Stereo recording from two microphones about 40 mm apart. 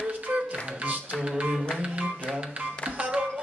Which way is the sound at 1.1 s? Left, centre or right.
Centre.